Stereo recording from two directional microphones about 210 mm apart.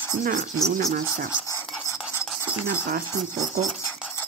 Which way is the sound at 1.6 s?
Centre (ahead or behind).